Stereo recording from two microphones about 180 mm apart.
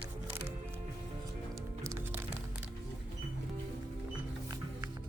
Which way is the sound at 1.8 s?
15° right (ahead or behind).